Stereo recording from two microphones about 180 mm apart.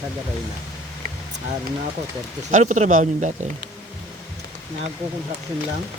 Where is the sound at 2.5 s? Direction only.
45° right (ahead or behind).